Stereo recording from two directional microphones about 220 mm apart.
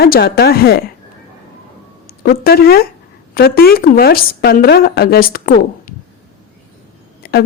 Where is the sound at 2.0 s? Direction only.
45° left (ahead or behind).